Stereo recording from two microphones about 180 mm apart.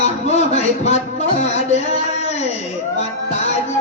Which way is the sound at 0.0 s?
35° left (ahead or behind).